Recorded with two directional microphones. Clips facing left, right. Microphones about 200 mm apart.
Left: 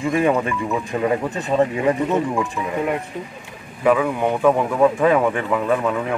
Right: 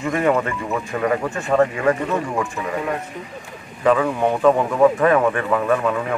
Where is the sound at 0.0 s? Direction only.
15° left (ahead or behind).